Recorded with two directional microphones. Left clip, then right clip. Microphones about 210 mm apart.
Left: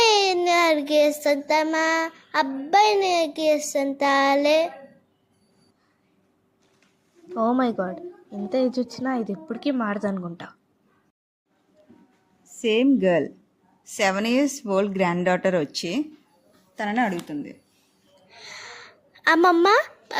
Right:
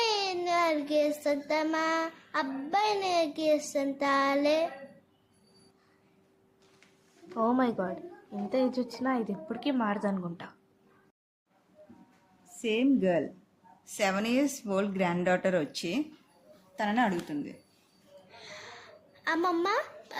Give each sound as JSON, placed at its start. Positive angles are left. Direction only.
{"t": 0.0, "sound": "child singing", "side_deg": 40}
{"t": 7.3, "sound": "a woman's voice", "side_deg": 20}
{"t": 12.6, "sound": "a woman's voice", "side_deg": 40}
{"t": 18.3, "sound": "a sound", "side_deg": 35}